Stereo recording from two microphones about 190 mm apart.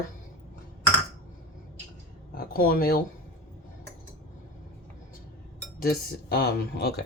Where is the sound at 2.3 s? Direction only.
50° left (ahead or behind).